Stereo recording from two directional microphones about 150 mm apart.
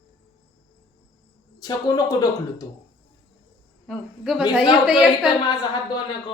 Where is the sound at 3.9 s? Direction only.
5° right (ahead or behind).